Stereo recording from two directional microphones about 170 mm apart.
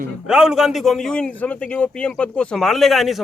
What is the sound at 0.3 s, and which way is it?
A man's voice, 5° right (ahead or behind).